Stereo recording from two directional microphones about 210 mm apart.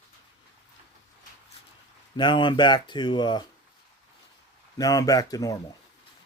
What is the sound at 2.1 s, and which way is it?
Speech, 20° left (ahead or behind).